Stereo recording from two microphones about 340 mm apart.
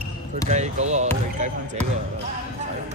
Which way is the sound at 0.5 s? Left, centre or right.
Centre.